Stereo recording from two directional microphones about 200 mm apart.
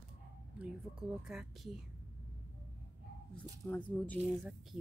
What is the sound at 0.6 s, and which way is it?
Speech, 5° right (ahead or behind).